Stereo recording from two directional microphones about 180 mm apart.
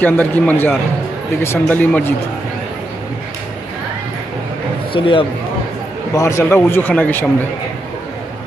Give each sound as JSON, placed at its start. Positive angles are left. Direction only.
{"t": 0.0, "sound": "a man's voice", "side_deg": 10}
{"t": 4.9, "sound": "speech", "side_deg": 30}
{"t": 6.1, "sound": "a man's voice", "side_deg": 15}